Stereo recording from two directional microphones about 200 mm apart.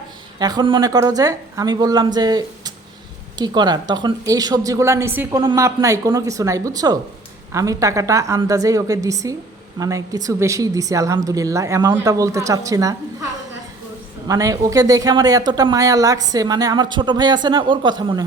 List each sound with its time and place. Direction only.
0.3 s a woman's voice: 20° right (ahead or behind)
14.3 s speech: 15° right (ahead or behind)